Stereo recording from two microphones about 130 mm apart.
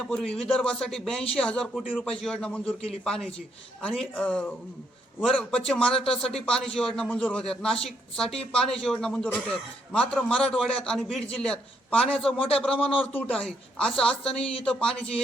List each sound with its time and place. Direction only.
0.0 s a woman's voice: 5° left (ahead or behind)
5.9 s speech: 50° left (ahead or behind)
6.4 s a woman's voice: 5° left (ahead or behind)